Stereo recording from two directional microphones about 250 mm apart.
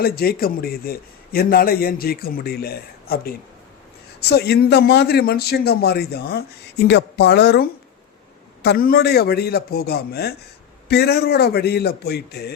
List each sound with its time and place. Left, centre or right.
0.0 s speech: left